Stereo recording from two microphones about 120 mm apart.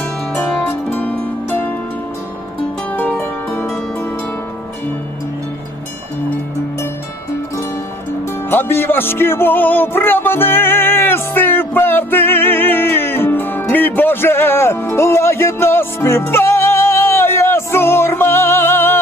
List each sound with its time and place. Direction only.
0.3 s music: 10° left (ahead or behind)
2.9 s music: 15° left (ahead or behind)
8.4 s music: 20° left (ahead or behind)